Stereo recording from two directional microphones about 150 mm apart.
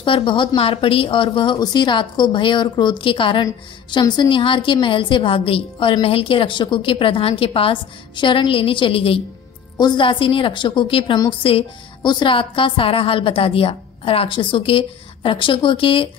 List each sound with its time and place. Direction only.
0.0 s a woman's voice: 35° left (ahead or behind)